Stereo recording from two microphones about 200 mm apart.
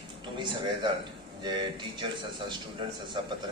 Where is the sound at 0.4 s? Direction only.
25° right (ahead or behind).